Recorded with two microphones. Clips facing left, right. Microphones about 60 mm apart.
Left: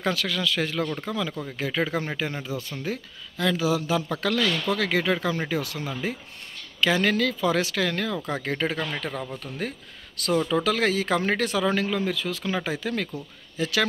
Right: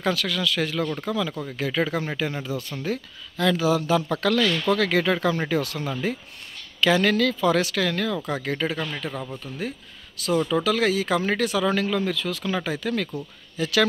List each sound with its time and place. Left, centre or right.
0.0 s speech: left
2.2 s speech: left
2.8 s speech: centre
9.0 s speech: left
10.5 s speech: left
11.6 s speech: left